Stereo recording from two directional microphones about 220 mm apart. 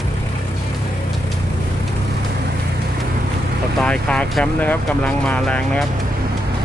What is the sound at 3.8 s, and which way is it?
Speech, 5° left (ahead or behind).